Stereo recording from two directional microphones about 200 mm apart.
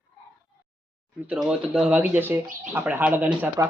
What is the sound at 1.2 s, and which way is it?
Speech, 5° right (ahead or behind).